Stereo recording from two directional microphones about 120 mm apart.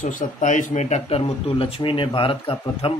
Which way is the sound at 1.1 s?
55° left (ahead or behind).